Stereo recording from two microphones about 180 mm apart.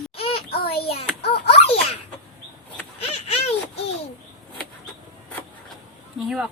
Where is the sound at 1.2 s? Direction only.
35° left (ahead or behind).